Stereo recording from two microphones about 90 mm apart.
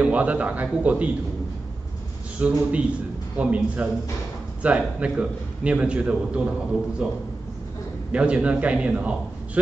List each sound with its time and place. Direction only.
0.0 s a man's voice: 15° right (ahead or behind)
2.4 s a man's voice: 15° right (ahead or behind)